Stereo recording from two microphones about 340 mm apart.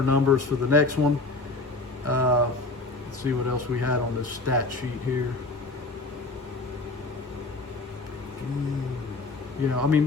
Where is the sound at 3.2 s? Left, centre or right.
Right.